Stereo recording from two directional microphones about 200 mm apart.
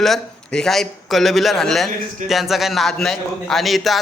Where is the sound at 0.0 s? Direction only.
Centre (ahead or behind).